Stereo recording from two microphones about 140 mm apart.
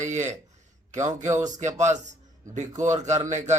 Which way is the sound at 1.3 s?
25° right (ahead or behind).